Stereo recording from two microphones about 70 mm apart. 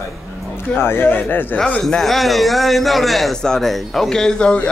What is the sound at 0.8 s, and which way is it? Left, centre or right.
Speech, left.